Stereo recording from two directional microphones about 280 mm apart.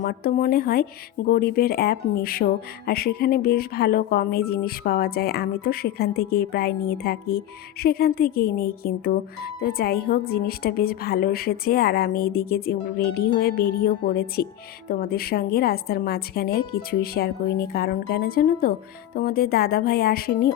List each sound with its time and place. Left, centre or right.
0.0 s speech: left